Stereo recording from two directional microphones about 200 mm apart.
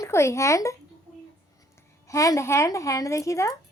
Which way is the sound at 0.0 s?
15° left (ahead or behind).